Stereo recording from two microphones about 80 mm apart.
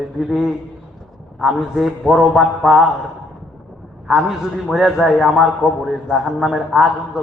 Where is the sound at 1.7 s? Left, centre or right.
Centre.